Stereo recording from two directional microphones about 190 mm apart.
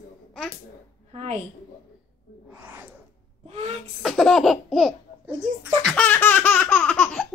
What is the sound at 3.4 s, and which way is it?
Speech, 35° right (ahead or behind).